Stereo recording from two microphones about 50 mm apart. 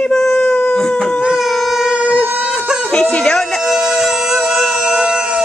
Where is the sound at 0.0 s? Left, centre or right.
Centre.